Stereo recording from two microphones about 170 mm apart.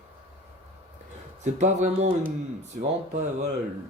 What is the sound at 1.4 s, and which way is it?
Speech, 45° right (ahead or behind).